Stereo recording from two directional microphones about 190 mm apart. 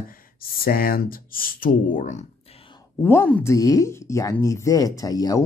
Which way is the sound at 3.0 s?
10° left (ahead or behind).